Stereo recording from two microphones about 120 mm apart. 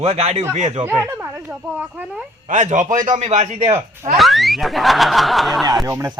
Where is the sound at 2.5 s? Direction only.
85° right.